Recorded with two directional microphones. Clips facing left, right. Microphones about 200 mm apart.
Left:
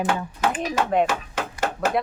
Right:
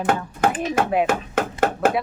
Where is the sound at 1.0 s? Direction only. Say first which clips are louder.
Right 3 dB; 55° right (ahead or behind).